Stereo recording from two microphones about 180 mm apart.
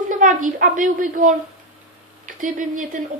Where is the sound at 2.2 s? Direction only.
45° right (ahead or behind).